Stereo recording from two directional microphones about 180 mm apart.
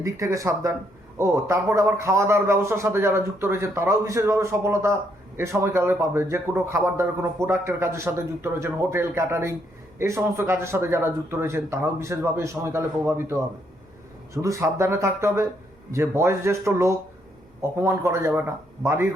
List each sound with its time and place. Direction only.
0.0 s a man's voice: 15° right (ahead or behind)
14.4 s a man's voice: 15° right (ahead or behind)